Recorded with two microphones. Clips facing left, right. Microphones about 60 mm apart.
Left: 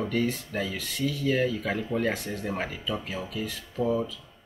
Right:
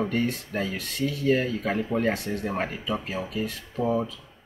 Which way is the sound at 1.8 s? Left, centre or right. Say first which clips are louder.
Right 2 dB; right.